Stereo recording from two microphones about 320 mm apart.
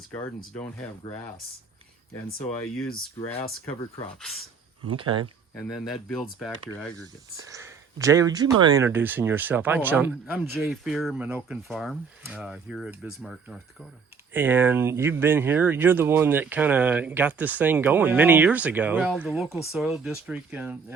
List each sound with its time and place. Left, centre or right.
0.1 s speech: centre
3.2 s speech: centre
4.9 s speech: centre
5.5 s speech: centre
7.4 s speech: centre